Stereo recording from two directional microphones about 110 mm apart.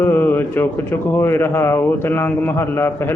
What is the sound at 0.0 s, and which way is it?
Mantra, 20° left (ahead or behind).